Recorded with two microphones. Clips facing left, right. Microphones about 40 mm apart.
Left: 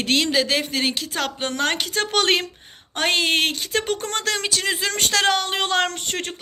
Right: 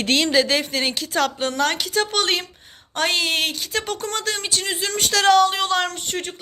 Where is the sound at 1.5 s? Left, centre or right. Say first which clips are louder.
Right 1 dB; left.